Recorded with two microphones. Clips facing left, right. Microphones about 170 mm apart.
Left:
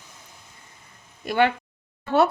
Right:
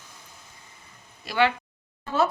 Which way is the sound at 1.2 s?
50° left (ahead or behind).